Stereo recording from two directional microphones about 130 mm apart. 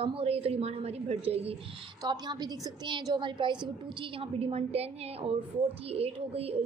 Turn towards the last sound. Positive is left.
turn(degrees=-50)  # may be behind; listen again after turning